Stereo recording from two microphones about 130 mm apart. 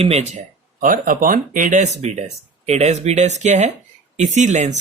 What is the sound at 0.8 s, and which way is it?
Speech, 90° right.